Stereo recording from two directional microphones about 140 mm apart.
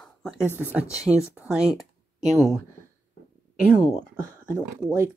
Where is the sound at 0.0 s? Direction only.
5° left (ahead or behind).